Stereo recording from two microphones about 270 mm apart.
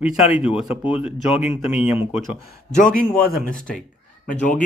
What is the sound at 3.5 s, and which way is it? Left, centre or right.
Speech, centre.